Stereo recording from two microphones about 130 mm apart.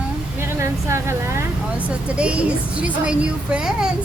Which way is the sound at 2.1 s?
10° right (ahead or behind).